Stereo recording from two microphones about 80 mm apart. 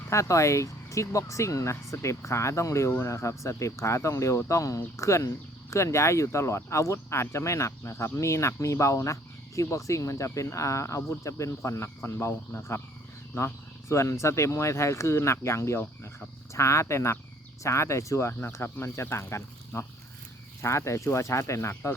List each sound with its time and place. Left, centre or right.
0.1 s speech: left